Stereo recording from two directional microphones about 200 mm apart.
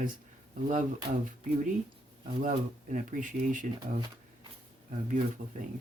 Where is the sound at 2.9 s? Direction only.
40° right (ahead or behind).